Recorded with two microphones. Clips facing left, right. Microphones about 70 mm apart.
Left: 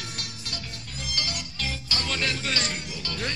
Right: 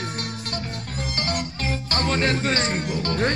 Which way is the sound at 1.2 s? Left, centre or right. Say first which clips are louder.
Right 9 dB; right.